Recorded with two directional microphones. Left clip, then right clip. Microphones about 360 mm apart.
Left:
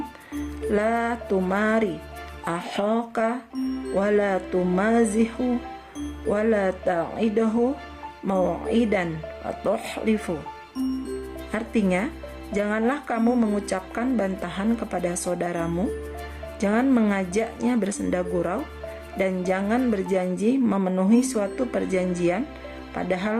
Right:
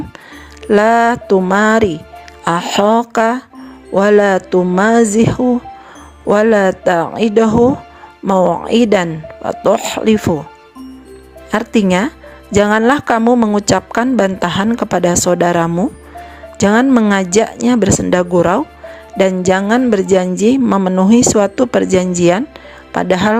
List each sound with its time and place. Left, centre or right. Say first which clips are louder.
0.7 s speech: right 14 dB; right
11.5 s speech: right 11 dB; right